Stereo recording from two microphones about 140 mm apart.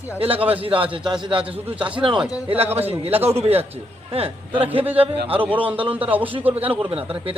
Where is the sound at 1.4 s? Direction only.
10° right (ahead or behind).